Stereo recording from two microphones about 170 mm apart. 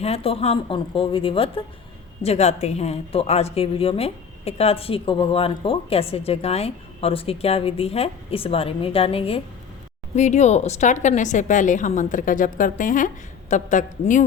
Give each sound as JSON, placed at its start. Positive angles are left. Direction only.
{"t": 0.0, "sound": "a woman's voice", "side_deg": 35}